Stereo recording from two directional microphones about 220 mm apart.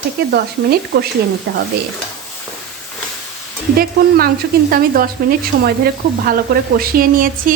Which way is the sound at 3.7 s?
40° right (ahead or behind).